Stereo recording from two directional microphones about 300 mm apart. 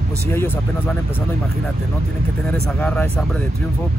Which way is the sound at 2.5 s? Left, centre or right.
Centre.